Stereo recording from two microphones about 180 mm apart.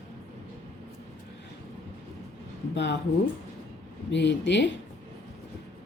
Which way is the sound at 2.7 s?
75° left (ahead or behind).